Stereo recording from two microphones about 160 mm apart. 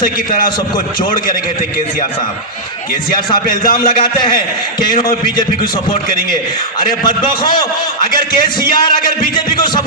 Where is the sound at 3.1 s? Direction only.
65° left (ahead or behind).